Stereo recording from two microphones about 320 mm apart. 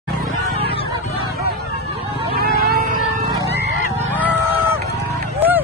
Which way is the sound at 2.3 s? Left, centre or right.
Right.